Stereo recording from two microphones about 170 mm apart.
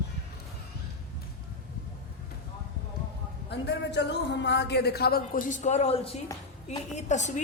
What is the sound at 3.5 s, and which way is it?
A woman's voice, 90° left.